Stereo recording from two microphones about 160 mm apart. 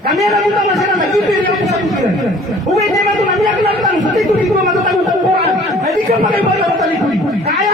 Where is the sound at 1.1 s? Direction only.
Centre (ahead or behind).